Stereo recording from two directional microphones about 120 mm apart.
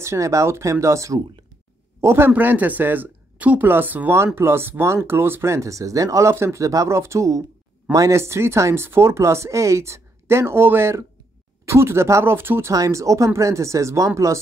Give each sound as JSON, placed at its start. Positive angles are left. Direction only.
{"t": 0.0, "sound": "speech", "side_deg": -25}
{"t": 12.7, "sound": "speech", "side_deg": -30}